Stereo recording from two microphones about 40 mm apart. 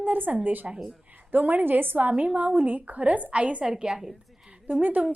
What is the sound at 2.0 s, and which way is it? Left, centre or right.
Speech, right.